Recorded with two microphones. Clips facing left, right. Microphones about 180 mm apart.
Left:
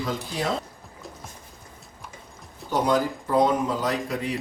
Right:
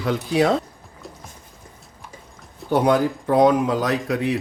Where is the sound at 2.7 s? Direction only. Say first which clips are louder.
Right 5 dB; 65° right (ahead or behind).